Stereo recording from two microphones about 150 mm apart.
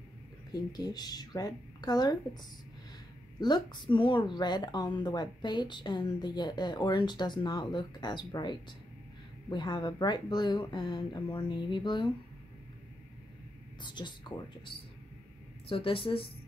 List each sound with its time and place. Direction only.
0.5 s a woman's voice: 25° left (ahead or behind)
3.3 s a woman's voice: 30° left (ahead or behind)
13.7 s speech: 30° left (ahead or behind)
15.7 s speech: 35° left (ahead or behind)